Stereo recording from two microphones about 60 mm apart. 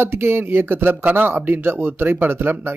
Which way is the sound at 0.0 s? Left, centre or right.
Right.